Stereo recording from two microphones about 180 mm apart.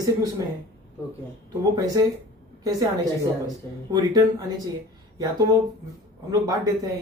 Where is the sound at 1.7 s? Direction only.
20° right (ahead or behind).